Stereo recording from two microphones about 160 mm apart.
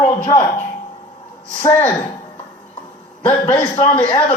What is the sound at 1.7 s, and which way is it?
Speech, 15° left (ahead or behind).